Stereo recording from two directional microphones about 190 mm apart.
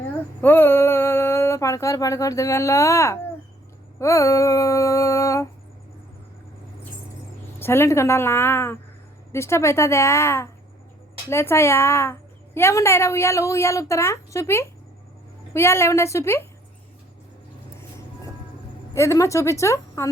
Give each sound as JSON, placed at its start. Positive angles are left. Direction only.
{"t": 0.4, "sound": "a woman's voice", "side_deg": 10}
{"t": 7.6, "sound": "a woman's voice", "side_deg": 15}
{"t": 18.9, "sound": "a woman's voice", "side_deg": 15}